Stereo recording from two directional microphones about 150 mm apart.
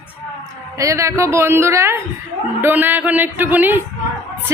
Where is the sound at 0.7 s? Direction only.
20° right (ahead or behind).